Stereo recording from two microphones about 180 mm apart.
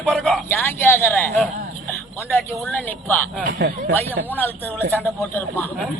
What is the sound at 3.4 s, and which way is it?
Speech, 60° right (ahead or behind).